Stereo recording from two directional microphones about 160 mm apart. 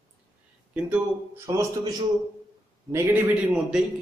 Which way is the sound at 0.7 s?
10° right (ahead or behind).